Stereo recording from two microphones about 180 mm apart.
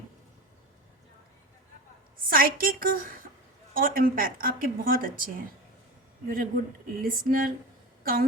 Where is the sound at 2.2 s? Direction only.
50° right (ahead or behind).